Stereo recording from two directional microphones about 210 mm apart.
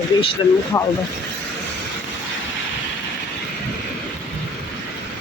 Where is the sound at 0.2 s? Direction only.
25° left (ahead or behind).